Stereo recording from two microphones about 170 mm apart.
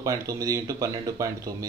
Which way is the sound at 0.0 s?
20° right (ahead or behind).